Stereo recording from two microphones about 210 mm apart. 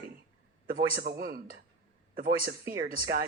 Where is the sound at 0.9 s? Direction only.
45° right (ahead or behind).